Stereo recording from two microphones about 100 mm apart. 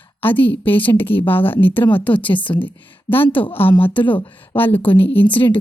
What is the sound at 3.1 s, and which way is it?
Speech, 20° left (ahead or behind).